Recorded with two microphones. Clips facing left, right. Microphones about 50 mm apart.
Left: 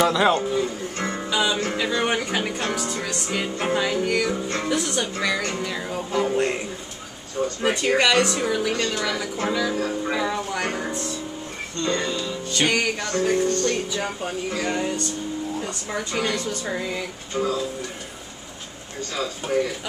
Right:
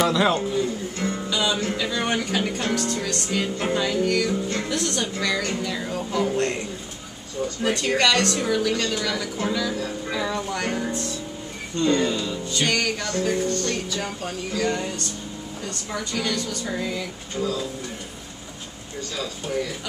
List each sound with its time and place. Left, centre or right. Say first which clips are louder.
0.0 s speech: left 1 dB; centre
0.9 s music: even; left
1.3 s music: left 2 dB; centre
1.8 s a sound: left 2 dB; centre
2.2 s speech: even; centre
7.6 s speech: left 1 dB; centre
9.8 s speech: left 4 dB; left
10.1 s speech: left 1 dB; centre
11.7 s speech: right 4 dB; centre
12.6 s a woman's voice: left 2 dB; centre
14.8 s a woman's voice: left 4 dB; centre; by 16.5 s left
16.6 s speech: even; centre
17.4 s a woman's voice: left 2 dB; left
19.1 s speech: left 4 dB; left